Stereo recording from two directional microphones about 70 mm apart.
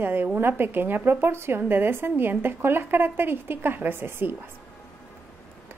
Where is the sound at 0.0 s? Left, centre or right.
Right.